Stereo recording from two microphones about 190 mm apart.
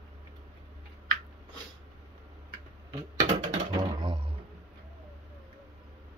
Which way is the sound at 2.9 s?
25° right (ahead or behind).